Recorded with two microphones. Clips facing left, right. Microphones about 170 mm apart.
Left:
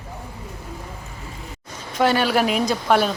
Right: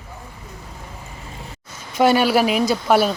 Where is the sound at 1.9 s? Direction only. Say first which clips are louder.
Right 3 dB; 10° right (ahead or behind).